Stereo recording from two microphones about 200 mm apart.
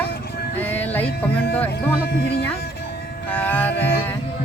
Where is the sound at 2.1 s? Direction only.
55° left (ahead or behind).